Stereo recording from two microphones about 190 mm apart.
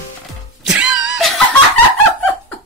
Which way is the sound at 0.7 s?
Centre (ahead or behind).